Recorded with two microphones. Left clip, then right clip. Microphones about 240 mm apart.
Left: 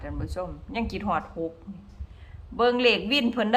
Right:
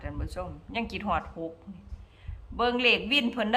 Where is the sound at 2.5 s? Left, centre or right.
Centre.